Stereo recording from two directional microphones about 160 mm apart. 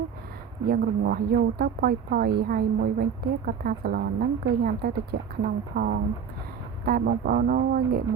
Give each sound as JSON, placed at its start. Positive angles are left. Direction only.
{"t": 0.7, "sound": "speech", "side_deg": -70}